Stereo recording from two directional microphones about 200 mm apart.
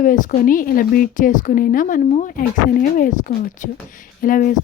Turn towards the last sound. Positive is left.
turn(degrees=45)  # may be behind; listen again after turning